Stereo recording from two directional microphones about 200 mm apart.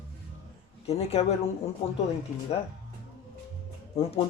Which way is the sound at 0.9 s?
30° left (ahead or behind).